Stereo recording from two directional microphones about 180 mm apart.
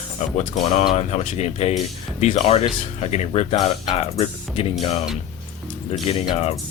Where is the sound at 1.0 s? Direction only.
35° left (ahead or behind).